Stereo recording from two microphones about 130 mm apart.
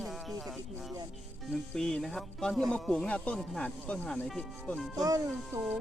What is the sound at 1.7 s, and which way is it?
Speech, 5° left (ahead or behind).